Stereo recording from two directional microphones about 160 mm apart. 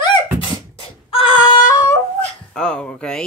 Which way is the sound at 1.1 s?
30° left (ahead or behind).